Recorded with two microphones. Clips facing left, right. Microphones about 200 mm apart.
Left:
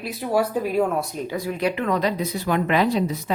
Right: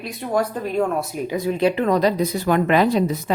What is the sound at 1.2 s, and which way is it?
Speech, 20° right (ahead or behind).